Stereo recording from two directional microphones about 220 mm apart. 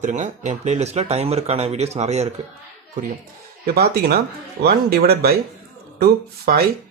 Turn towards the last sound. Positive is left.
turn(degrees=-45)  # may be behind; listen again after turning